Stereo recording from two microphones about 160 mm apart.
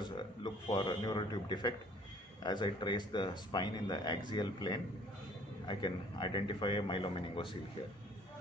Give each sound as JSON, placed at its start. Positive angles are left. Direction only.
{"t": 0.0, "sound": "speech", "side_deg": 30}